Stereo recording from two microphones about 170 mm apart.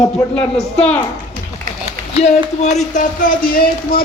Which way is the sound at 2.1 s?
40° left (ahead or behind).